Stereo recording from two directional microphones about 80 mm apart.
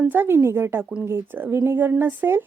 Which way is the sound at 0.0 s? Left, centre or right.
Right.